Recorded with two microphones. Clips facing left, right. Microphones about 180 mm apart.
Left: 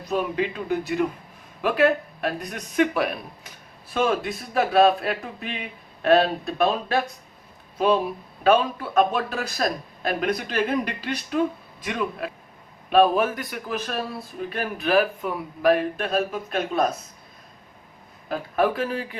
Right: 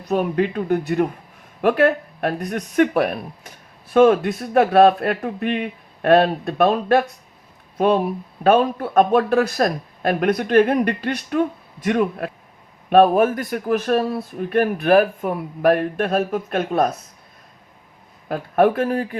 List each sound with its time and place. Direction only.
0.1 s speech: 50° right (ahead or behind)
18.3 s speech: 55° right (ahead or behind)